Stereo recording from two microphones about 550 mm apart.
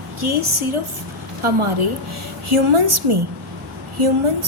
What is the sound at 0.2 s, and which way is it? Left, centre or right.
Speech, right.